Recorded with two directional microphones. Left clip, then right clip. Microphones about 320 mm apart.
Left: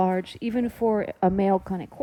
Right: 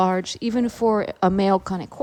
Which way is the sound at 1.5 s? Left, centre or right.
Left.